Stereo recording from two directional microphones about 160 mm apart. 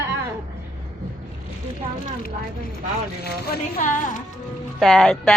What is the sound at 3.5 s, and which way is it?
Speech, 60° left (ahead or behind).